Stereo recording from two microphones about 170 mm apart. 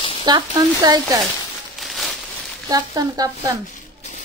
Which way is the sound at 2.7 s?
20° right (ahead or behind).